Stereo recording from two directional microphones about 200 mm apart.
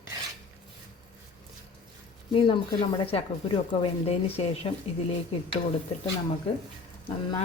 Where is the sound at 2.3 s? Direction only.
25° left (ahead or behind).